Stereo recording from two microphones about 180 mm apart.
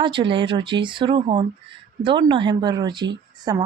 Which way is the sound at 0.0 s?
25° right (ahead or behind).